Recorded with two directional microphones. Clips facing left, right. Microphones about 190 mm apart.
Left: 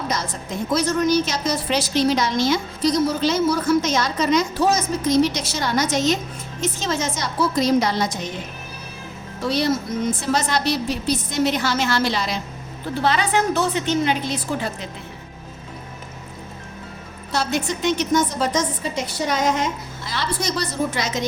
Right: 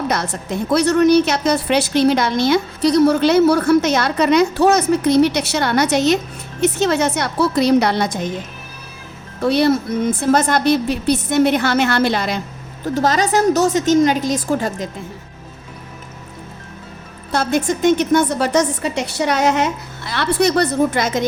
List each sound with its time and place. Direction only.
0.7 s a woman's voice: 65° right (ahead or behind)
9.4 s a woman's voice: 60° right (ahead or behind)
12.8 s a woman's voice: 45° right (ahead or behind)
17.3 s a woman's voice: 50° right (ahead or behind)